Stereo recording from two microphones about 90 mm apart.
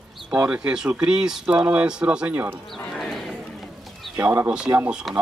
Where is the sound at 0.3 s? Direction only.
15° right (ahead or behind).